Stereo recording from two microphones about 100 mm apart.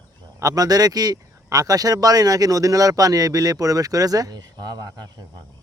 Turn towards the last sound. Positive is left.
turn(degrees=-40)  # may be behind; listen again after turning